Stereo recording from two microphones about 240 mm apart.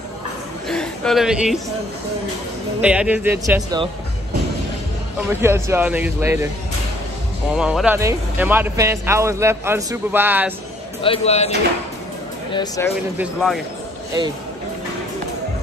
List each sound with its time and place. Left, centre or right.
0.7 s a sound: centre
2.8 s a man's voice: centre
5.3 s a man's voice: centre
7.5 s a man's voice: centre
11.0 s speech: left
12.5 s speech: centre
13.2 s speech: centre